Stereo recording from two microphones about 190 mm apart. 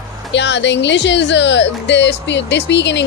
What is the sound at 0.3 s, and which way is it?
Speech, 65° left (ahead or behind).